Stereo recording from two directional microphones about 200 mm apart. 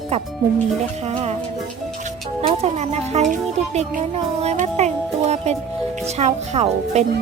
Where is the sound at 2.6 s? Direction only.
35° right (ahead or behind).